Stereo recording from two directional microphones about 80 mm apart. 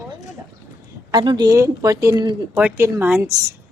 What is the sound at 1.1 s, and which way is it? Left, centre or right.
Speech, right.